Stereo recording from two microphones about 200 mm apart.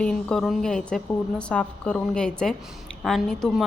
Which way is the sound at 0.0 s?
5° left (ahead or behind).